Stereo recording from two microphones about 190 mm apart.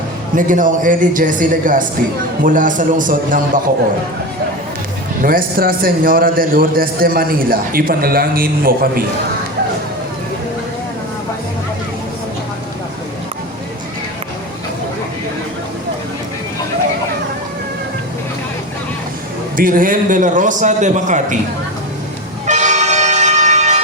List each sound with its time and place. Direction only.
0.3 s a man's voice: 45° right (ahead or behind)
5.2 s a man's voice: 50° right (ahead or behind)
19.5 s a man's voice: 45° right (ahead or behind)
22.4 s vehicle: 40° right (ahead or behind)